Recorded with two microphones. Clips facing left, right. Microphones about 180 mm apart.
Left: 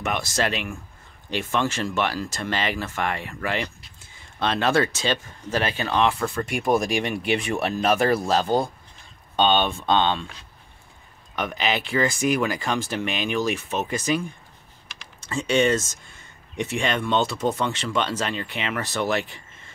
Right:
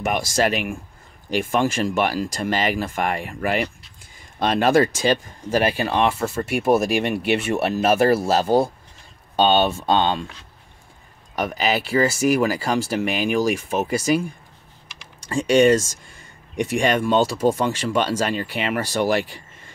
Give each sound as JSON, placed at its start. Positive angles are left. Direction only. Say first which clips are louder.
{"t": 0.0, "sound": "speech", "louder": "right 4 dB", "side_deg": -10}
{"t": 3.4, "sound": "a sound", "louder": "right 5 dB", "side_deg": -10}
{"t": 4.9, "sound": "speech", "louder": "right 5 dB", "side_deg": -10}
{"t": 11.3, "sound": "speech", "louder": "right 3 dB", "side_deg": -40}
{"t": 11.8, "sound": "speech", "louder": "right 5 dB", "side_deg": -5}
{"t": 17.8, "sound": "speech", "louder": "right 5 dB", "side_deg": -45}